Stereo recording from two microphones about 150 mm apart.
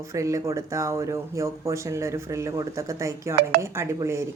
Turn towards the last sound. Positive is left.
turn(degrees=-20)  # may be behind; listen again after turning